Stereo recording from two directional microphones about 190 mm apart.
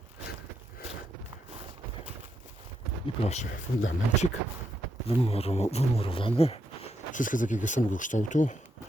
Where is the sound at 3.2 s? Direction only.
35° left (ahead or behind).